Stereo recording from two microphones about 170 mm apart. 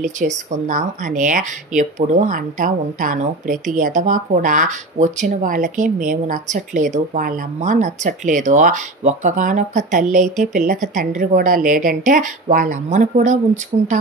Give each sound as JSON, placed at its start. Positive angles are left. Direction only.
{"t": 0.0, "sound": "speech", "side_deg": -50}